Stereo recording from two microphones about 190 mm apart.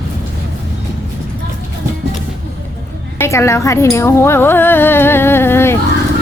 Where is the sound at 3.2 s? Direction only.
15° left (ahead or behind).